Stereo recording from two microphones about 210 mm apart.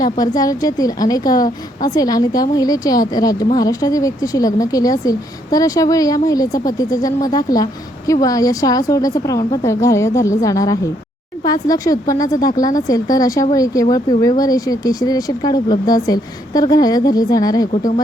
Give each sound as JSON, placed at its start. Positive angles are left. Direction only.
{"t": 0.0, "sound": "a woman's voice", "side_deg": 15}